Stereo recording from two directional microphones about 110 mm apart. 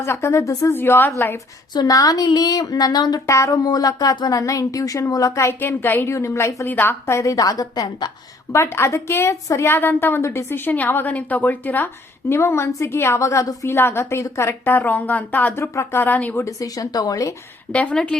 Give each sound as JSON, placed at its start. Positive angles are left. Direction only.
{"t": 0.0, "sound": "a woman's voice", "side_deg": 25}
{"t": 1.7, "sound": "speech", "side_deg": 35}
{"t": 8.5, "sound": "a woman's voice", "side_deg": 25}
{"t": 16.4, "sound": "speech", "side_deg": 30}
{"t": 17.7, "sound": "a woman's voice", "side_deg": 10}